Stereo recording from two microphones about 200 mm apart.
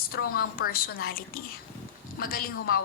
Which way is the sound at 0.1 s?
50° left (ahead or behind).